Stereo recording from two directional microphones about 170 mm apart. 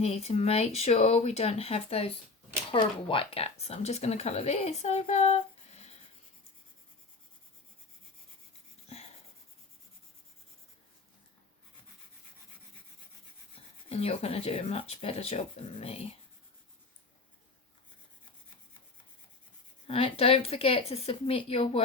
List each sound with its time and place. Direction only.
0.0 s speech: 35° left (ahead or behind)
13.9 s speech: 35° left (ahead or behind)
19.9 s speech: 35° left (ahead or behind)